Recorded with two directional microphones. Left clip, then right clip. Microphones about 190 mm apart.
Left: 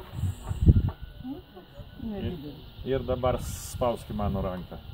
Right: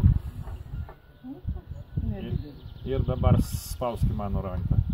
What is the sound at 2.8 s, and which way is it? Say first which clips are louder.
Speech: left 2 dB; 10° left (ahead or behind).